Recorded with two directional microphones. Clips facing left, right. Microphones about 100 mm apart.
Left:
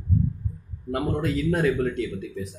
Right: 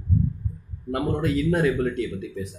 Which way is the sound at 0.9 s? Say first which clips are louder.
Right 1 dB; centre (ahead or behind).